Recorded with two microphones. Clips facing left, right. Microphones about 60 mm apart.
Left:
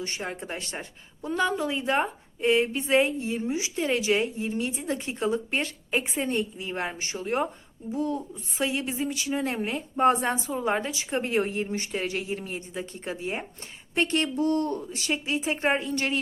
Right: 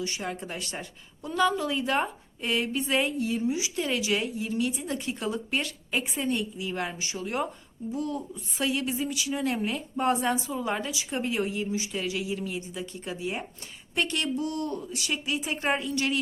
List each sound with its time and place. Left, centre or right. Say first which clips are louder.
0.0 s a woman's voice: even; left